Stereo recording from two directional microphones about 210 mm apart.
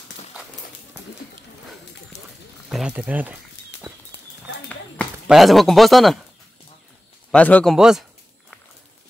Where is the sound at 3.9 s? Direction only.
15° right (ahead or behind).